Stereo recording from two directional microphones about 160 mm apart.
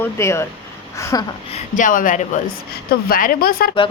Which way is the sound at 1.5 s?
55° left (ahead or behind).